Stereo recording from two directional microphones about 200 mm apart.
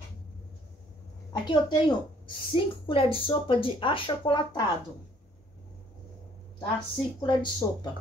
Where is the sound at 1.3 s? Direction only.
20° left (ahead or behind).